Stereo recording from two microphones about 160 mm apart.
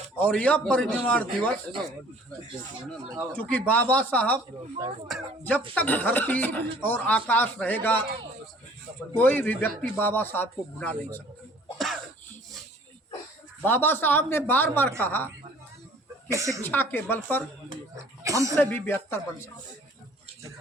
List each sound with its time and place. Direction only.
0.2 s speech: 10° left (ahead or behind)
3.3 s speech: 10° left (ahead or behind)
5.4 s speech: 10° left (ahead or behind)
9.1 s speech: 10° left (ahead or behind)
13.7 s speech: 15° left (ahead or behind)
16.3 s speech: 20° right (ahead or behind)
16.6 s speech: 10° left (ahead or behind)
18.2 s a sound: 20° right (ahead or behind)
18.5 s speech: 10° left (ahead or behind)